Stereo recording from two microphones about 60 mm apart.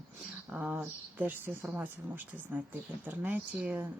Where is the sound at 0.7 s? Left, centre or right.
Right.